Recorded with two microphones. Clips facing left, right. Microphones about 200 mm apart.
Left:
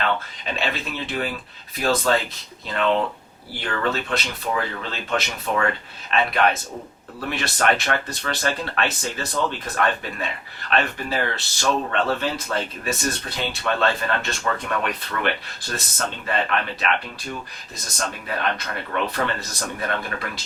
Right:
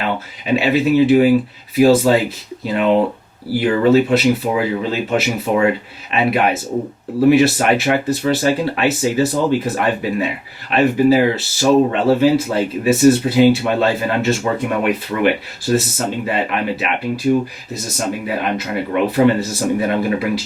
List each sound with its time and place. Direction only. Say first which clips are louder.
0.0 s speech: right 3 dB; 10° right (ahead or behind)